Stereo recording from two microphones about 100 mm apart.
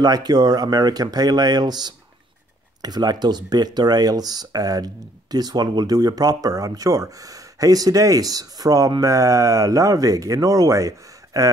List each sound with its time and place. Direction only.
0.0 s speech: 40° right (ahead or behind)